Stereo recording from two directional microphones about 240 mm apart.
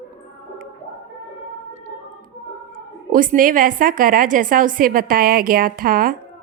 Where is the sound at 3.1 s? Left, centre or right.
Right.